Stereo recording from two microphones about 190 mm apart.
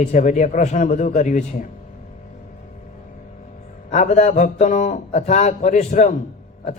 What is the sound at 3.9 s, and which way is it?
A man's voice, 40° left (ahead or behind).